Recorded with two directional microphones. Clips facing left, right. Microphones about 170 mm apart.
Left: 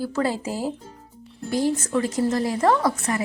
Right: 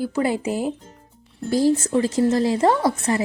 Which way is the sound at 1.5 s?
30° right (ahead or behind).